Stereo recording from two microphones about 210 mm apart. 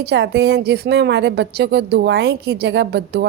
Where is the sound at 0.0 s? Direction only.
55° right (ahead or behind).